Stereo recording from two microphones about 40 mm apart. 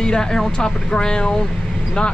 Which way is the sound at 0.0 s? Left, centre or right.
Centre.